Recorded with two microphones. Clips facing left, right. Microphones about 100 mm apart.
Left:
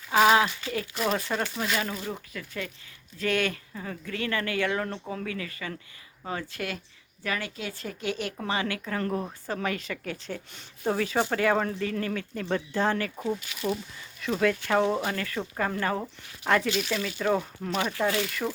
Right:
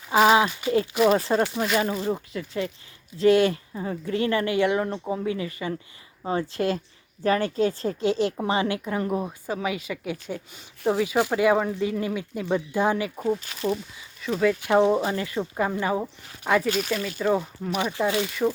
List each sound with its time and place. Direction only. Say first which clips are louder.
0.1 s a sound: right 2 dB; 5° right (ahead or behind)
0.6 s speech: right 9 dB; 25° right (ahead or behind)
1.7 s a woman's voice: right 7 dB; 15° right (ahead or behind)
2.0 s a woman's voice: right 8 dB; 25° right (ahead or behind)
13.4 s speech: right 4 dB; 40° right (ahead or behind)
14.2 s speech: right 3 dB; centre (ahead or behind)
14.6 s a woman's voice: right 5 dB; 20° right (ahead or behind)
16.6 s speech: right 3 dB; 45° right (ahead or behind)
16.9 s speech: right 2 dB; centre (ahead or behind)
17.9 s speech: right 2 dB; 20° right (ahead or behind)